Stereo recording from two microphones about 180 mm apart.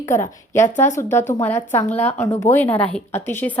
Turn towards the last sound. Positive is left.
turn(degrees=10)  # may be behind; listen again after turning